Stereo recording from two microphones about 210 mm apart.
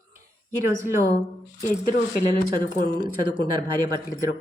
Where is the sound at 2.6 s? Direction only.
20° right (ahead or behind).